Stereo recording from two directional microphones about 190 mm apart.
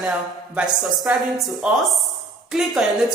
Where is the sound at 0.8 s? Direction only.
Centre (ahead or behind).